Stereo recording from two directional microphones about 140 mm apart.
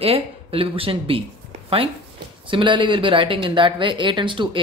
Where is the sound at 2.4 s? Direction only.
35° right (ahead or behind).